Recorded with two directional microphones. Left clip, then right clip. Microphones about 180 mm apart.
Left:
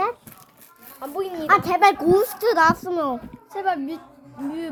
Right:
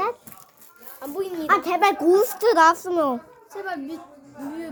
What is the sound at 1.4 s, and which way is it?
A woman's voice, 25° right (ahead or behind).